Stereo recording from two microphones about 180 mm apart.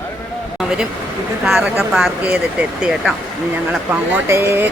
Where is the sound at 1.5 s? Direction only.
Centre (ahead or behind).